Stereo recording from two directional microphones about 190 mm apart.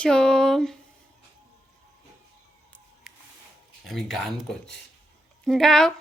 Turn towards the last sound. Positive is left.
turn(degrees=5)  # may be behind; listen again after turning